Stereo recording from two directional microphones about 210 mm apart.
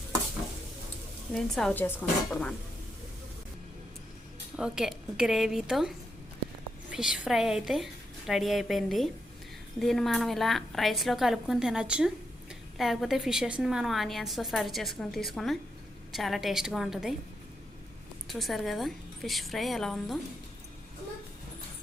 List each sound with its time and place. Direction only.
1.3 s a woman's voice: centre (ahead or behind)
4.5 s a woman's voice: 5° right (ahead or behind)
6.9 s a woman's voice: 5° right (ahead or behind)
18.3 s a woman's voice: centre (ahead or behind)